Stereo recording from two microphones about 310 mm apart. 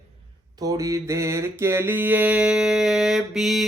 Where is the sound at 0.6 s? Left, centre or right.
Centre.